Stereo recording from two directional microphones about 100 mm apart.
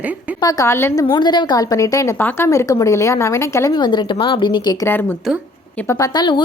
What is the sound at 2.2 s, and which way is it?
A woman's voice, 20° left (ahead or behind).